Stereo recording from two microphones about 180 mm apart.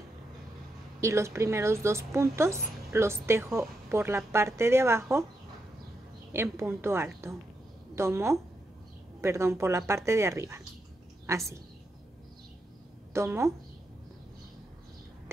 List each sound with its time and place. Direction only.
1.0 s speech: 15° right (ahead or behind)
6.3 s speech: 15° right (ahead or behind)
13.1 s speech: 15° right (ahead or behind)